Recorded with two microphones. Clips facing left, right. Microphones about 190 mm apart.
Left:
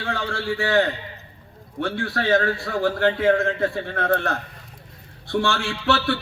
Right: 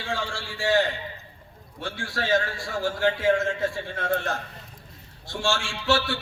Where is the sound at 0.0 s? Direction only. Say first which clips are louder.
Left 4 dB; 60° left (ahead or behind).